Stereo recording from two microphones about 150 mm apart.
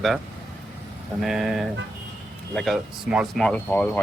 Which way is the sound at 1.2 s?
Centre (ahead or behind).